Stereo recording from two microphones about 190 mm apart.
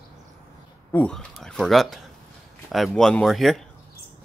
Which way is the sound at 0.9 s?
5° left (ahead or behind).